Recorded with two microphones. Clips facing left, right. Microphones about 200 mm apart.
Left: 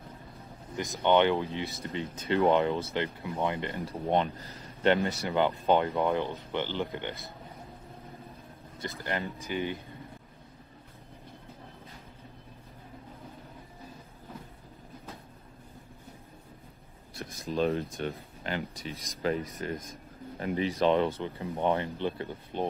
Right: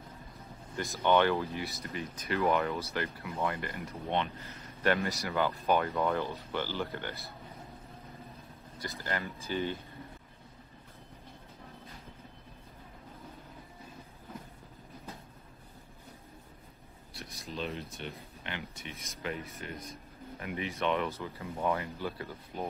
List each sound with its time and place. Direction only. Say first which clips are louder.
0.7 s speech: left 2 dB; 15° left (ahead or behind)
8.8 s speech: left 3 dB; 25° left (ahead or behind)
17.1 s a sound: left 8 dB; 50° left (ahead or behind)
18.4 s speech: left 8 dB; 40° left (ahead or behind)